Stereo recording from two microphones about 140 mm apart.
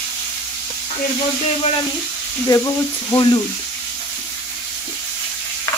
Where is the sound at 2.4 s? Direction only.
20° left (ahead or behind).